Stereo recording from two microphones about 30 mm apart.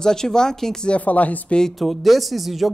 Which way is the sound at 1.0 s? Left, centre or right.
Left.